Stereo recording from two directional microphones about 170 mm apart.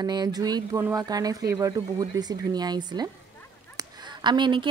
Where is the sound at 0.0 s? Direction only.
25° right (ahead or behind).